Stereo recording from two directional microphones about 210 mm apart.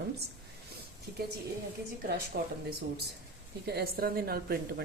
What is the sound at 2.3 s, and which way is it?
Speech, 50° right (ahead or behind).